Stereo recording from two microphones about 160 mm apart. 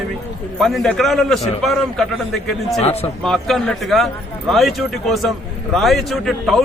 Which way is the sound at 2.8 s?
40° left (ahead or behind).